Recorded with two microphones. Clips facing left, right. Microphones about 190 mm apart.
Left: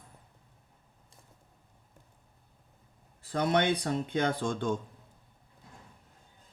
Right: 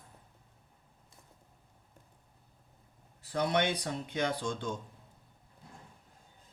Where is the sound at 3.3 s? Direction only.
55° left (ahead or behind).